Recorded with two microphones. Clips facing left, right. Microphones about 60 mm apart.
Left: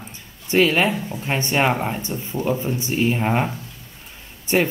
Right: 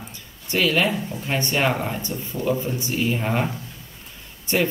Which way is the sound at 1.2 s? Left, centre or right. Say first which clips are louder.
Left 2 dB; left.